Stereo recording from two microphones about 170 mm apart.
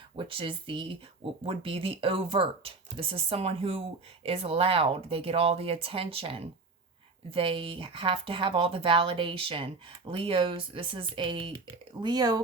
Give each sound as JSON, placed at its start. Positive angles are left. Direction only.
{"t": 0.2, "sound": "speech", "side_deg": -30}